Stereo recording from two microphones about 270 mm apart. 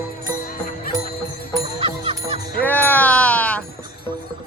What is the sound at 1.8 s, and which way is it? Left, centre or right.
Music, centre.